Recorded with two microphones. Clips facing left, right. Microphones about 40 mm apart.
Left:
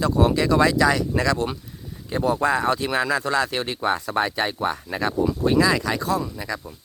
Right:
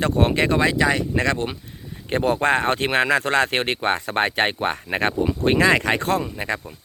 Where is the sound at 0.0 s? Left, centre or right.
Right.